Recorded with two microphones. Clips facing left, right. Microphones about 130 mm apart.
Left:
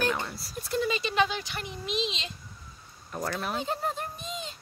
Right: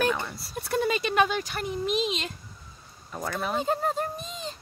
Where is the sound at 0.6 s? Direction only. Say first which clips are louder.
Right 3 dB; 60° right (ahead or behind).